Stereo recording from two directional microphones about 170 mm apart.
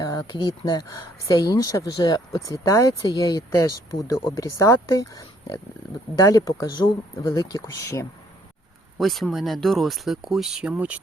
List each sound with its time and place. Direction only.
0.0 s a sound: 20° left (ahead or behind)
0.9 s speech: 20° left (ahead or behind)
9.0 s speech: centre (ahead or behind)